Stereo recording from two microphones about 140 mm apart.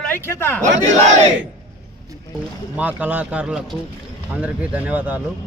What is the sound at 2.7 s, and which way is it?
A man's voice, 10° right (ahead or behind).